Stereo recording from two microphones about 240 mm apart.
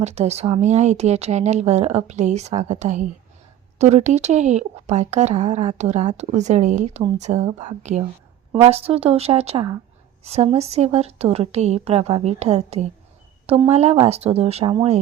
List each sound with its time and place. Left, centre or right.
0.0 s speech: right